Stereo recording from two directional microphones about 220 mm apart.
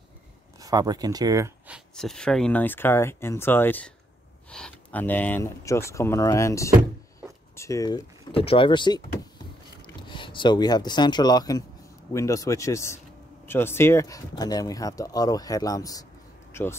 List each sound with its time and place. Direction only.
0.6 s speech: 15° right (ahead or behind)
2.0 s speech: 5° left (ahead or behind); by 9.0 s 20° left (ahead or behind)
10.0 s speech: 20° left (ahead or behind)